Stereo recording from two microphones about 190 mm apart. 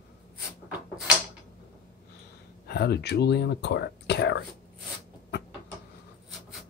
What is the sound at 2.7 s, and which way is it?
Speech, 60° left (ahead or behind).